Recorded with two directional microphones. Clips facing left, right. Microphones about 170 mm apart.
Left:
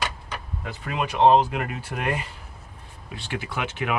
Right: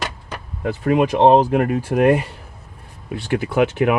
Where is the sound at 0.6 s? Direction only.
50° right (ahead or behind).